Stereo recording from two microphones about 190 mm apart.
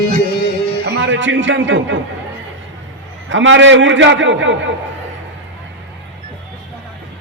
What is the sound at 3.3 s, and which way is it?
A man's voice, 80° right.